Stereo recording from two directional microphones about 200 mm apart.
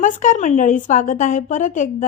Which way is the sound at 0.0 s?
40° left (ahead or behind).